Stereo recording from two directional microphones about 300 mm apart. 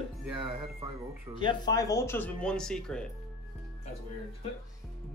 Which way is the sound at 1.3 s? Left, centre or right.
Centre.